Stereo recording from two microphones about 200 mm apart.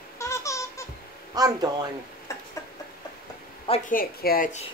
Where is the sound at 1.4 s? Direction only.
20° right (ahead or behind).